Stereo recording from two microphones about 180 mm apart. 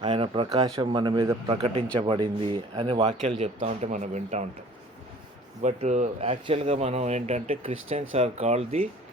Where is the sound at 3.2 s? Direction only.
40° right (ahead or behind).